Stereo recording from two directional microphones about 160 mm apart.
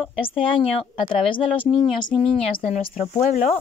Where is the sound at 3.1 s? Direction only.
50° left (ahead or behind).